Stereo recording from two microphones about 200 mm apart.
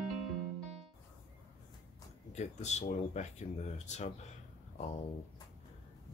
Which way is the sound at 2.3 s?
35° left (ahead or behind).